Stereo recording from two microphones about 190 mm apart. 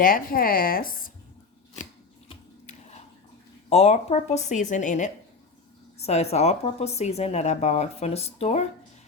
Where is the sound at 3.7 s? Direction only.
35° left (ahead or behind).